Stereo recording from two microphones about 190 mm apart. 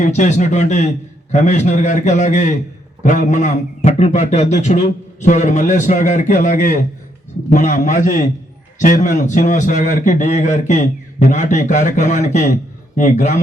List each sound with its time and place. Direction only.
0.0 s a man's voice: 40° left (ahead or behind)